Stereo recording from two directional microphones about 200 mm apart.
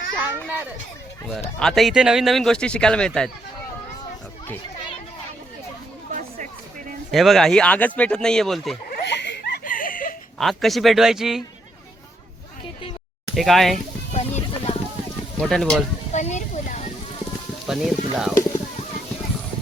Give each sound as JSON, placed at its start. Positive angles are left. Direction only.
{"t": 0.2, "sound": "a child's voice", "side_deg": -10}
{"t": 1.4, "sound": "speech", "side_deg": 5}
{"t": 7.1, "sound": "speech", "side_deg": 0}
{"t": 8.9, "sound": "a sound", "side_deg": 55}
{"t": 10.3, "sound": "speech", "side_deg": 0}
{"t": 13.3, "sound": "speech", "side_deg": 0}
{"t": 14.1, "sound": "a sound", "side_deg": 35}
{"t": 15.4, "sound": "speech", "side_deg": 0}
{"t": 16.1, "sound": "a sound", "side_deg": 35}
{"t": 17.7, "sound": "speech", "side_deg": 0}